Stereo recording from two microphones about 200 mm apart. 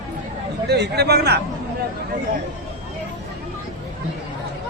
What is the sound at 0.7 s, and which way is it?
Speech, 55° right (ahead or behind).